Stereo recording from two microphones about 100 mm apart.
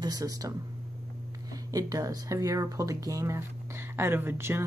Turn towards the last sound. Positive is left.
turn(degrees=-25)  # may be behind; listen again after turning